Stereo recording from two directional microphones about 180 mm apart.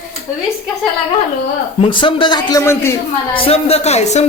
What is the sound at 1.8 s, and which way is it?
A man's voice, 30° left (ahead or behind).